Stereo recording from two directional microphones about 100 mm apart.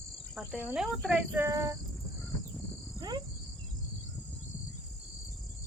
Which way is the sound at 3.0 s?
40° right (ahead or behind).